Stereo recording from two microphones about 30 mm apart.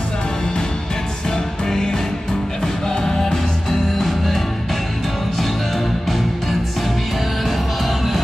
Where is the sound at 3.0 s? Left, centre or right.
Centre.